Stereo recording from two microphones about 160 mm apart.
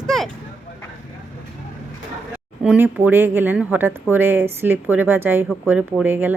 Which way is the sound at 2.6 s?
5° right (ahead or behind).